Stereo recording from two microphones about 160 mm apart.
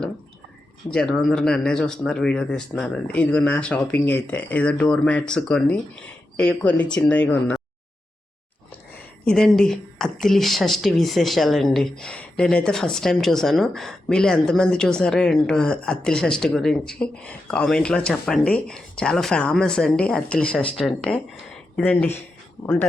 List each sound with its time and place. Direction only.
0.9 s speech: 5° left (ahead or behind)
9.2 s speech: 5° left (ahead or behind)